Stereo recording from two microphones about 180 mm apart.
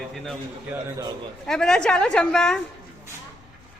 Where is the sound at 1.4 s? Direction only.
5° left (ahead or behind).